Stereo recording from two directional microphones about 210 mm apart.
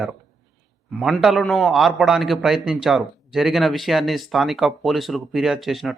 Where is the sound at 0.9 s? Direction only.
Centre (ahead or behind).